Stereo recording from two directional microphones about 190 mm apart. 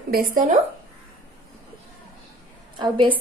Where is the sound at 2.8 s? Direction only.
25° right (ahead or behind).